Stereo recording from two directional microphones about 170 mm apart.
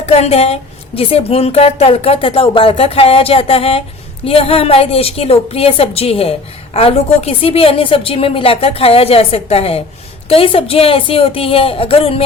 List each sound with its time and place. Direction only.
0.0 s a woman's voice: 40° left (ahead or behind)